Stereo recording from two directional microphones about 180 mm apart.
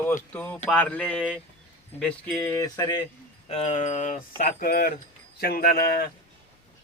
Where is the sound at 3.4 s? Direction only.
40° left (ahead or behind).